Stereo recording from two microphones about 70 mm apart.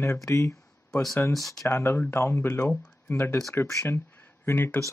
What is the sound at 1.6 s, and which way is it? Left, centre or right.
Speech, left.